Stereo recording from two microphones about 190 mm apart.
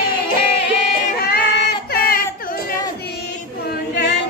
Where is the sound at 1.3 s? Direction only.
55° left (ahead or behind).